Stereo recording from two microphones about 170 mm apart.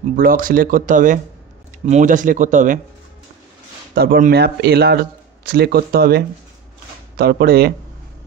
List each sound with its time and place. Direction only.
0.1 s speech: 55° right (ahead or behind)
3.9 s speech: 65° right (ahead or behind)